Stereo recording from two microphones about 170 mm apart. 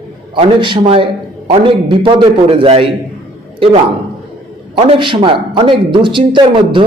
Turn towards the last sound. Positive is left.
turn(degrees=-30)  # may be behind; listen again after turning